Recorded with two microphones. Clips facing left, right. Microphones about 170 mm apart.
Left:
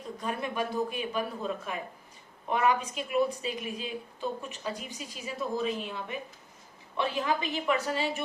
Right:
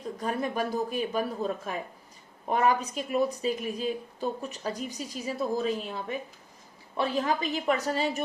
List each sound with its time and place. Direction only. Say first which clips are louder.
0.2 s a woman's voice: right 3 dB; 40° right (ahead or behind)